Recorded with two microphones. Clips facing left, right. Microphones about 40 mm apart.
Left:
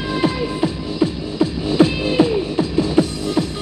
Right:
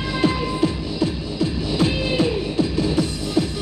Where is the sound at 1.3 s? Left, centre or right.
Left.